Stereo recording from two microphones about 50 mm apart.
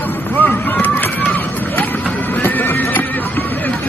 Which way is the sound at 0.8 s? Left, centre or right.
Left.